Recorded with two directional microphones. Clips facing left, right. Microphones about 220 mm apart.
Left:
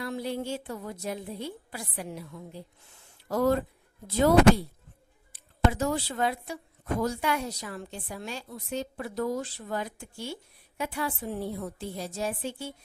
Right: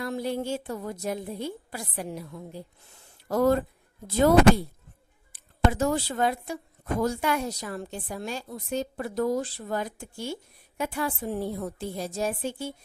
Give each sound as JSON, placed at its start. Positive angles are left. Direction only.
{"t": 0.0, "sound": "a woman's voice", "side_deg": -45}